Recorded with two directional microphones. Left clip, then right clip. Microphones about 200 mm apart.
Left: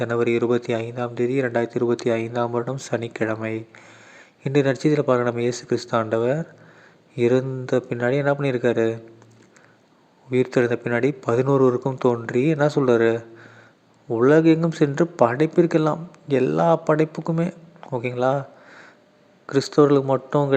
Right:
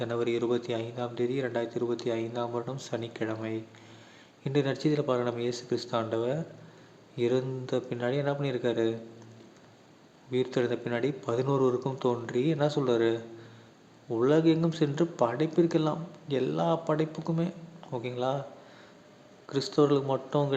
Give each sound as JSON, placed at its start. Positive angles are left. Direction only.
{"t": 0.0, "sound": "a man's voice", "side_deg": 35}
{"t": 10.3, "sound": "a man's voice", "side_deg": 35}